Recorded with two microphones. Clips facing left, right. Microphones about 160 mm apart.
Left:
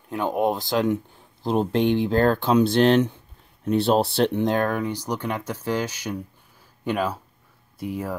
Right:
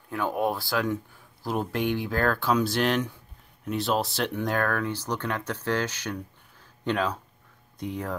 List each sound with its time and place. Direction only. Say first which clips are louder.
0.1 s speech: left 4 dB; 20° left (ahead or behind)